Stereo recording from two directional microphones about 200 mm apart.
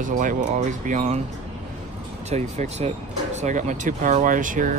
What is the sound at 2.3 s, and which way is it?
Speech, 35° right (ahead or behind).